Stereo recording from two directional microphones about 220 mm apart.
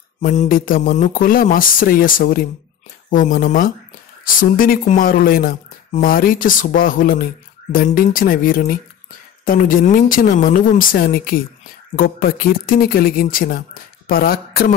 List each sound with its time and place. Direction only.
0.2 s speech: 35° left (ahead or behind)